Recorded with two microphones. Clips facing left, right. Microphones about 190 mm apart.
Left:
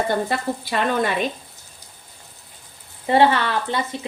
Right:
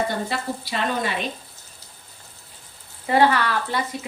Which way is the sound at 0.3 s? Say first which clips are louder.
Left 3 dB; 50° left (ahead or behind).